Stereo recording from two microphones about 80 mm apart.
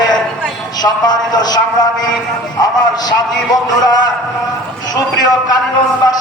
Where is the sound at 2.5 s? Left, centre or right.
Left.